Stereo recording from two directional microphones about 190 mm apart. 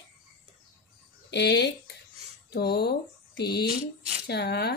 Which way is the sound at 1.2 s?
60° left (ahead or behind).